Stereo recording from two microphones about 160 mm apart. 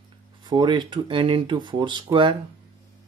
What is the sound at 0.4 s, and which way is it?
Speech, 30° right (ahead or behind).